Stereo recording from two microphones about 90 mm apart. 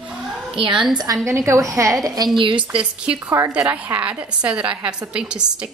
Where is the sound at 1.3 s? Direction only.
30° right (ahead or behind).